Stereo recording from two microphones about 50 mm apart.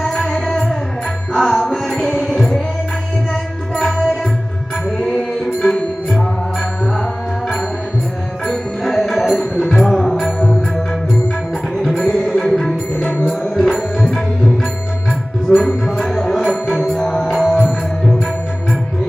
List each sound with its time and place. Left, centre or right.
0.0 s music: centre
3.9 s music: centre
4.9 s music: centre
5.4 s music: centre
8.4 s music: centre
9.0 s music: centre
9.7 s music: centre
11.7 s music: centre
13.6 s tabla: centre
15.5 s music: centre